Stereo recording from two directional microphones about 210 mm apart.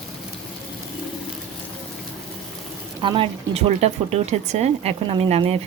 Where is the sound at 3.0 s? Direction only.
25° right (ahead or behind).